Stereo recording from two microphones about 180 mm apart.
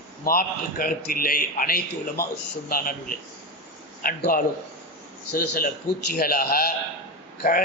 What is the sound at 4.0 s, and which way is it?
A man's voice, 55° left (ahead or behind).